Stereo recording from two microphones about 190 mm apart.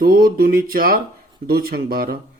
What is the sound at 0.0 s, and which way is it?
Speech, 50° right (ahead or behind).